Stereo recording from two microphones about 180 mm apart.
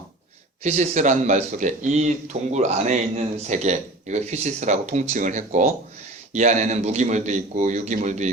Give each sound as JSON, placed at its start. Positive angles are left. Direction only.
{"t": 0.6, "sound": "speech", "side_deg": -40}